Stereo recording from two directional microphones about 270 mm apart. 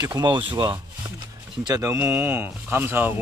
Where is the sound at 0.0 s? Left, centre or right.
Centre.